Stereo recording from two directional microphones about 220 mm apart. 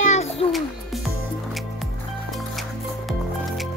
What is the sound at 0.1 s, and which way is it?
Music, 30° left (ahead or behind).